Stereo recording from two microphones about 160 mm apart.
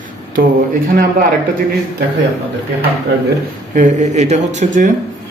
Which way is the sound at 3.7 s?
50° right (ahead or behind).